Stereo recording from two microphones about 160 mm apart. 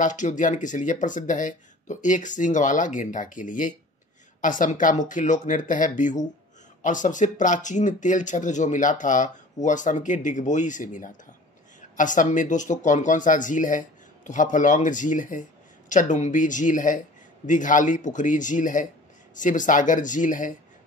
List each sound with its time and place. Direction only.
0.0 s speech: 50° left (ahead or behind)